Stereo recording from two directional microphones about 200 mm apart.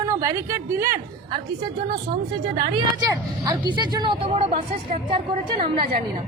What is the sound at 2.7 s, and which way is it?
Speech, 20° right (ahead or behind).